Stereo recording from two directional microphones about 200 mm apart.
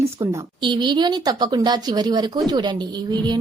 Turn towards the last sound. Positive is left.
turn(degrees=-20)  # may be behind; listen again after turning